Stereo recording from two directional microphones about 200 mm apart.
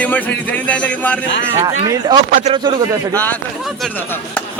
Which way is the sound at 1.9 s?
20° right (ahead or behind).